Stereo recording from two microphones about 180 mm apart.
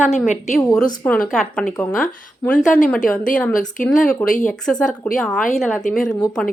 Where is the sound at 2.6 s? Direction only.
45° left (ahead or behind).